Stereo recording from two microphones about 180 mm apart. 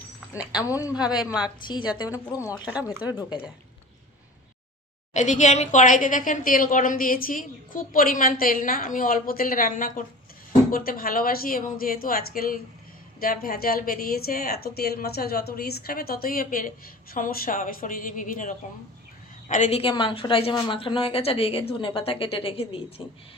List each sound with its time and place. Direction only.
0.6 s speech: 15° left (ahead or behind)
0.9 s a woman's voice: 5° right (ahead or behind)
1.6 s a woman's voice: 25° left (ahead or behind)
2.6 s speech: 5° right (ahead or behind)
5.1 s a woman's voice: 40° left (ahead or behind)